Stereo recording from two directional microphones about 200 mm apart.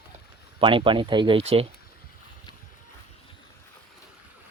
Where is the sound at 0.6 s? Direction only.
25° right (ahead or behind).